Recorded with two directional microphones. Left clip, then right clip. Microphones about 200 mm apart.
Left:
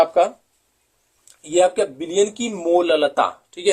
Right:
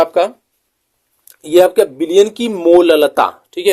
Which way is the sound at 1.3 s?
50° right (ahead or behind).